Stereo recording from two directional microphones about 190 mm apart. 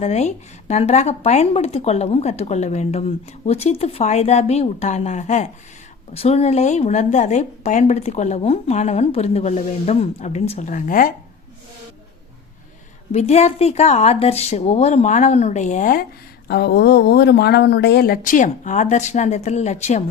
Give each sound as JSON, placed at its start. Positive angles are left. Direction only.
{"t": 0.0, "sound": "speech", "side_deg": 35}
{"t": 13.1, "sound": "speech", "side_deg": 35}
{"t": 16.5, "sound": "speech", "side_deg": 60}